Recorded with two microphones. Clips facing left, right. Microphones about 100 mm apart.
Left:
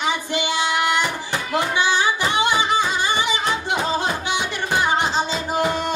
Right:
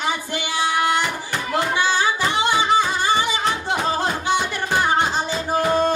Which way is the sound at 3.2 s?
15° left (ahead or behind).